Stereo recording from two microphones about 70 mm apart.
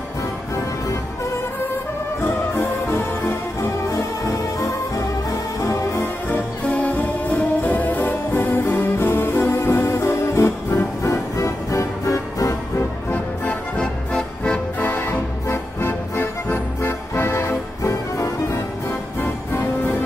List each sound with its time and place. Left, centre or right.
2.2 s music: left
3.9 s music: left
6.3 s music: centre; by 12.5 s left
13.1 s music: centre
14.8 s music: left
15.4 s music: left